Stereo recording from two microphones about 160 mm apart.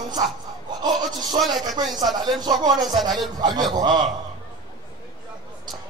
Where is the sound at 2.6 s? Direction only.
25° right (ahead or behind).